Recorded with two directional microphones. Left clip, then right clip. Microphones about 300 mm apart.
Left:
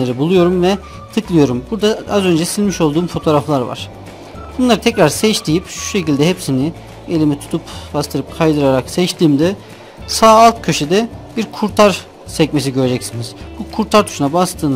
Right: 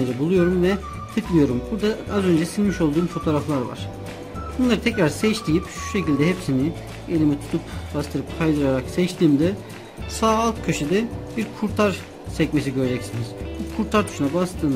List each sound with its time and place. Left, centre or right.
0.0 s speech: centre